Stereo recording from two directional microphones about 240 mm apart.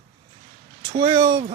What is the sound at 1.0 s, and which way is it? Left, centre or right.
Speech, centre.